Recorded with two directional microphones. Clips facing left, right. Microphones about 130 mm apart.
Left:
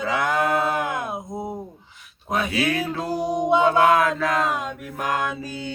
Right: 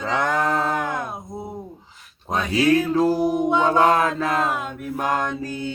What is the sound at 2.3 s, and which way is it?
Music, 30° right (ahead or behind).